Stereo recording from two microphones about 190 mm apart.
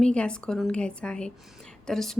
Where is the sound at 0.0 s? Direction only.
5° left (ahead or behind).